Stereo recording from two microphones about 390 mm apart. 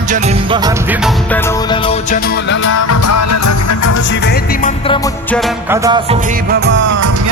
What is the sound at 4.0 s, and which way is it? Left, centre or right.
Music, left.